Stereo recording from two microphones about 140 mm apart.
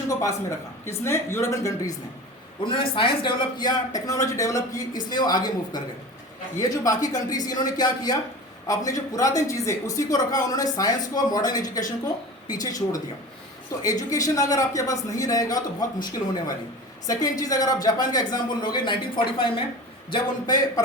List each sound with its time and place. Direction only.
0.1 s a man's voice: 25° left (ahead or behind)
2.6 s a man's voice: 40° left (ahead or behind)